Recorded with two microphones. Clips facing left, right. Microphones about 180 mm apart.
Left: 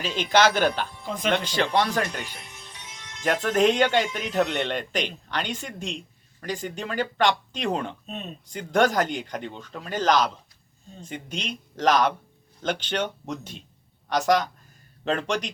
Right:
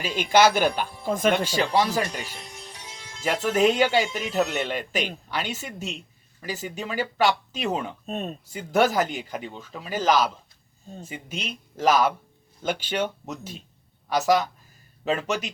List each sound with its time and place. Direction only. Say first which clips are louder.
0.0 s speech: right 2 dB; 10° right (ahead or behind)
1.0 s speech: right 8 dB; 45° right (ahead or behind)
1.5 s speech: right 1 dB; 10° right (ahead or behind)
2.2 s music: right 2 dB; 30° right (ahead or behind)
3.2 s speech: even; 5° right (ahead or behind)
8.0 s speech: right 5 dB; 45° right (ahead or behind)
8.4 s speech: even; 5° right (ahead or behind)